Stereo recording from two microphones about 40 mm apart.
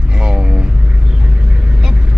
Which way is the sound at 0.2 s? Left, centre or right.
Centre.